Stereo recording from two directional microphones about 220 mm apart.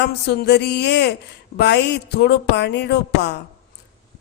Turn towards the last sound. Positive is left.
turn(degrees=50)  # may be behind; listen again after turning